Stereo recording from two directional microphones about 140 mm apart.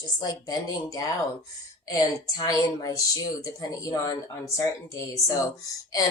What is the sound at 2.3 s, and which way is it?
Speech, 25° left (ahead or behind).